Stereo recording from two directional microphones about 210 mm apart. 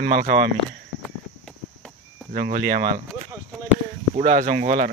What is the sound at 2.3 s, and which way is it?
Speech, 40° right (ahead or behind).